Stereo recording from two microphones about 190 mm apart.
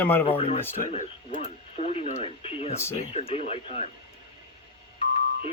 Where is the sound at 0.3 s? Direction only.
30° left (ahead or behind).